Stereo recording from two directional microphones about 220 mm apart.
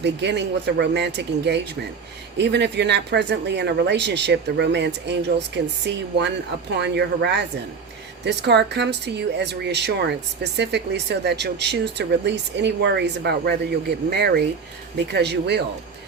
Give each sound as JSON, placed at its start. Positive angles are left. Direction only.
{"t": 0.0, "sound": "speech", "side_deg": -50}